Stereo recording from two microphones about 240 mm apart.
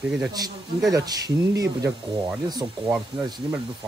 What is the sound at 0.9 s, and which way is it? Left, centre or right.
Speech, centre.